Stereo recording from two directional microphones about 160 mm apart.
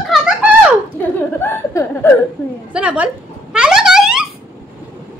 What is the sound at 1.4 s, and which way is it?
Chuckle, 15° left (ahead or behind).